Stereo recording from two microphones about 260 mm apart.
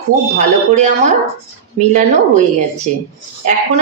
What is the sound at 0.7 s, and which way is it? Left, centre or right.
Speech, right.